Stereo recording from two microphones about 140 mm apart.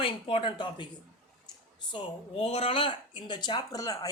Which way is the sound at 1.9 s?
45° left (ahead or behind).